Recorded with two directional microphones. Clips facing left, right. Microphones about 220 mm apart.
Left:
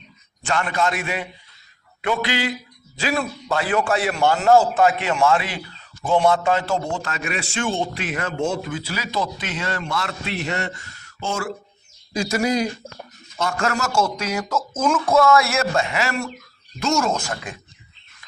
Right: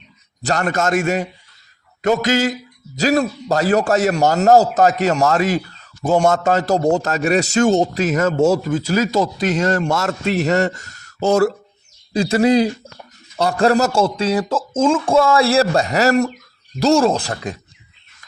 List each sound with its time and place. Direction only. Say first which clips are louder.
0.4 s a man's voice: right 3 dB; 40° right (ahead or behind)